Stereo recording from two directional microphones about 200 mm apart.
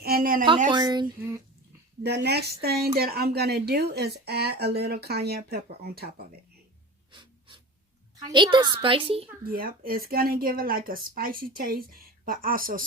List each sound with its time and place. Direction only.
0.0 s a sound: 45° right (ahead or behind)
0.7 s a woman's voice: 20° right (ahead or behind)
2.0 s speech: 55° right (ahead or behind)
7.1 s a sound: 25° right (ahead or behind)
8.2 s a woman's voice: 25° right (ahead or behind)
9.4 s speech: 45° right (ahead or behind)